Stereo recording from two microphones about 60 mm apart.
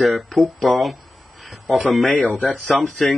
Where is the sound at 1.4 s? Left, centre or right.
Centre.